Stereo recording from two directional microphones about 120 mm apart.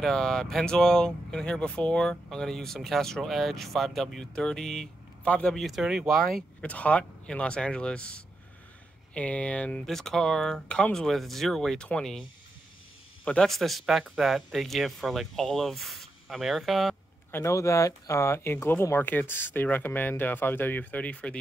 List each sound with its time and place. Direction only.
0.0 s speech: 5° left (ahead or behind)
13.2 s speech: 5° left (ahead or behind)
17.3 s speech: 25° left (ahead or behind)